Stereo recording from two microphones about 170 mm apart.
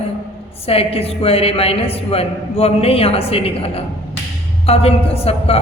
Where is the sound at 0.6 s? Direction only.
35° left (ahead or behind).